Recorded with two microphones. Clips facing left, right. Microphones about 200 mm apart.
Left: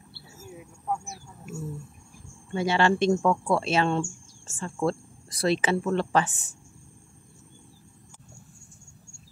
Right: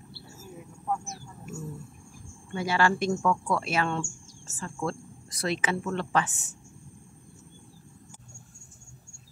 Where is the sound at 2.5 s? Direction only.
25° left (ahead or behind).